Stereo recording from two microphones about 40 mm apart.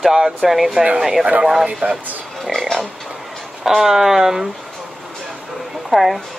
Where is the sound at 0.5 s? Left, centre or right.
Centre.